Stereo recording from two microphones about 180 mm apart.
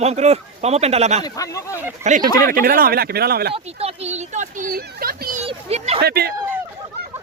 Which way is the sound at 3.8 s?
35° right (ahead or behind).